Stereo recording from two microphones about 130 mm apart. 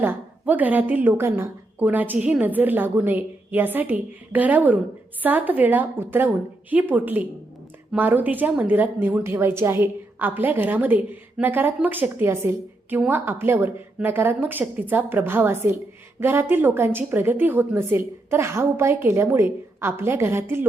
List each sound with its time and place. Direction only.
0.0 s a woman's voice: 15° right (ahead or behind)